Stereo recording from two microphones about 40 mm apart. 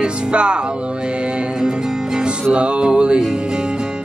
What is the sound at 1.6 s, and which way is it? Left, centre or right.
Music, centre.